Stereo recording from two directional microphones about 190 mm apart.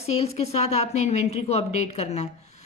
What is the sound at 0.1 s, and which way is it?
A woman's voice, 35° left (ahead or behind).